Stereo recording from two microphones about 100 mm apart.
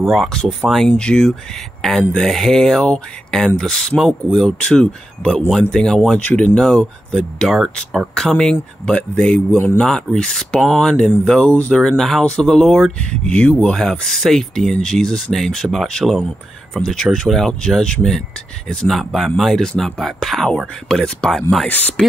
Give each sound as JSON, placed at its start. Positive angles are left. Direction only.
{"t": 0.0, "sound": "speech", "side_deg": 0}
{"t": 21.6, "sound": "speech", "side_deg": 15}